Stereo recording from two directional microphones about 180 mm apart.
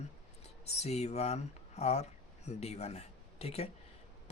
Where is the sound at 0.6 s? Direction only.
35° left (ahead or behind).